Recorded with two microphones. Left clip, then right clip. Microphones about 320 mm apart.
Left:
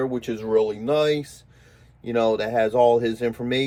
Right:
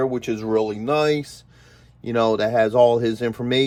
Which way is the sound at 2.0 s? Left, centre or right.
Right.